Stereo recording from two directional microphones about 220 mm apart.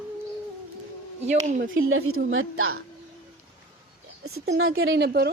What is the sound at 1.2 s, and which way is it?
Speech, 35° right (ahead or behind).